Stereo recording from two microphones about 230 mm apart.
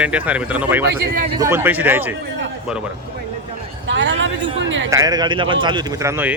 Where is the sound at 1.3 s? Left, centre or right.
Centre.